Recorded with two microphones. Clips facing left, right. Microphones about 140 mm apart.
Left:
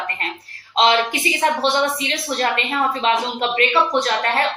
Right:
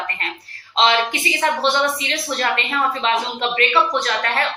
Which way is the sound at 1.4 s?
35° left (ahead or behind).